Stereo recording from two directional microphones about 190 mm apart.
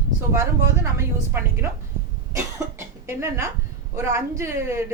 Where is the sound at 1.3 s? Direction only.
15° right (ahead or behind).